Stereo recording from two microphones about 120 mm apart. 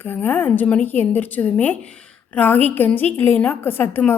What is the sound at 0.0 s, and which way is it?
A woman's voice, 15° left (ahead or behind).